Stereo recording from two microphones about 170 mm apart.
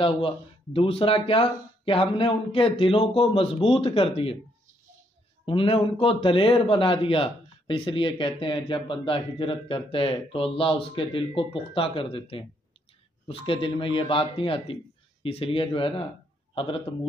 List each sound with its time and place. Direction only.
0.7 s a man's voice: 35° left (ahead or behind)
5.4 s a man's voice: 30° left (ahead or behind)